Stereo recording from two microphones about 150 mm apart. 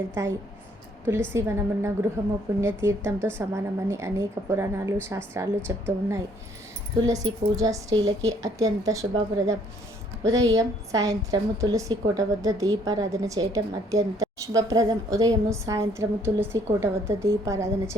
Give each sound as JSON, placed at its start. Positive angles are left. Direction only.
{"t": 0.1, "sound": "a woman's voice", "side_deg": -15}
{"t": 10.2, "sound": "a woman's voice", "side_deg": -25}